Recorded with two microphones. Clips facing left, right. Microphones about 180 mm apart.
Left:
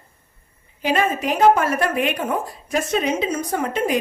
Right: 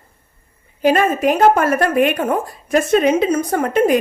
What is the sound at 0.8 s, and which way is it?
A woman's voice, 50° right (ahead or behind).